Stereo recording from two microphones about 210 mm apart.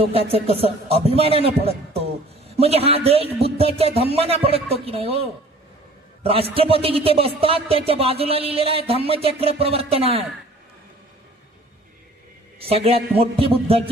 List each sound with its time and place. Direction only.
0.0 s a man's voice: 25° right (ahead or behind)
12.5 s a man's voice: 30° right (ahead or behind)